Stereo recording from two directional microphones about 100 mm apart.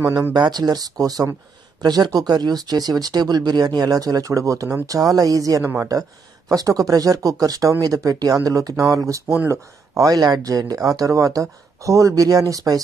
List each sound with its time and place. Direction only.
0.3 s speech: 45° right (ahead or behind)
5.6 s speech: 20° right (ahead or behind)
6.5 s speech: 40° right (ahead or behind)